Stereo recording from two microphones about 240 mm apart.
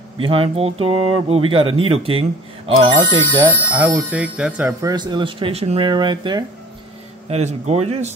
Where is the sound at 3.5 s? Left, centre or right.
Centre; by 8.1 s right.